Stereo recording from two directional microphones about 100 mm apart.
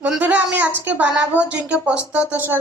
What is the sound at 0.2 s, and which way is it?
A woman's voice, 15° right (ahead or behind).